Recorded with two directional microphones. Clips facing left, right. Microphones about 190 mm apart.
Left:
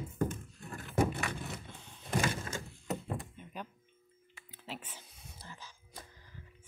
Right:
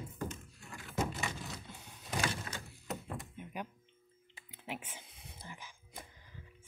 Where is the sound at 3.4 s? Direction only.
10° right (ahead or behind).